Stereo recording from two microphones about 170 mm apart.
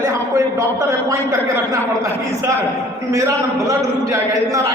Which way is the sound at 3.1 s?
20° right (ahead or behind).